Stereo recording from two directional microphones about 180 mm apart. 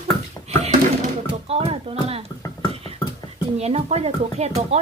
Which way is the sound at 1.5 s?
35° right (ahead or behind).